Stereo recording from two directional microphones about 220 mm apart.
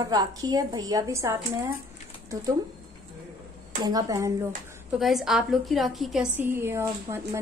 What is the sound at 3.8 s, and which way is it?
Speech, 15° right (ahead or behind).